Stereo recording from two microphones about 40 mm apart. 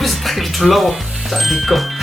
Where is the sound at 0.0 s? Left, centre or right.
Centre.